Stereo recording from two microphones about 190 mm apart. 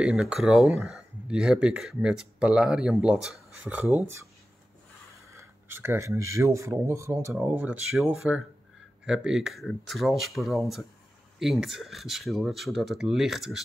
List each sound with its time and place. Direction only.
0.0 s speech: 5° right (ahead or behind)
5.1 s a sound: 15° right (ahead or behind)
6.3 s speech: 15° right (ahead or behind)